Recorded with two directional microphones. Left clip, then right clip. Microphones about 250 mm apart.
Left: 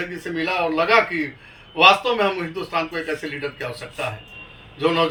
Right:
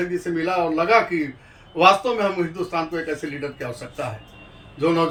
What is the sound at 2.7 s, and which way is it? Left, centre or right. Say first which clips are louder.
Speech: left 1 dB; centre.